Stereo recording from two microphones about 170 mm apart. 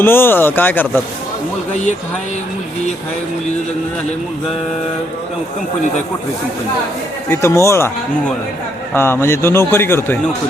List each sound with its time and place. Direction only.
0.0 s a man's voice: 15° left (ahead or behind)
7.3 s a man's voice: 15° left (ahead or behind)
8.9 s a man's voice: 15° left (ahead or behind)